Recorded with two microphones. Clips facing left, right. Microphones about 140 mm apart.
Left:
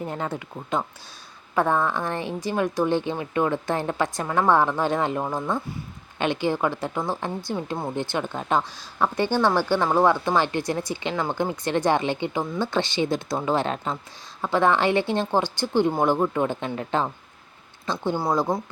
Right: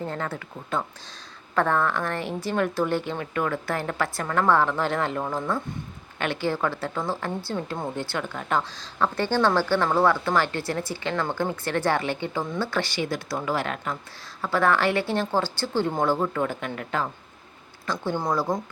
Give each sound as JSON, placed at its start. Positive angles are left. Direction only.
{"t": 0.0, "sound": "a woman's voice", "side_deg": 15}
{"t": 18.0, "sound": "a woman's voice", "side_deg": 15}